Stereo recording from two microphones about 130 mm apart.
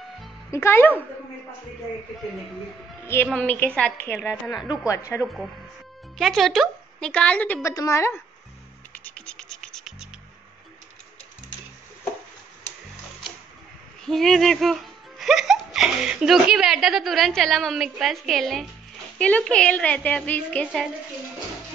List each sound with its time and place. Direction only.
0.5 s a woman's voice: 20° left (ahead or behind)
3.3 s a woman's voice: 10° left (ahead or behind)
4.8 s a woman's voice: 25° left (ahead or behind)
6.1 s a woman's voice: centre (ahead or behind)
7.7 s a woman's voice: 25° left (ahead or behind)
8.9 s scratch: 10° left (ahead or behind)
14.0 s a woman's voice: 5° left (ahead or behind)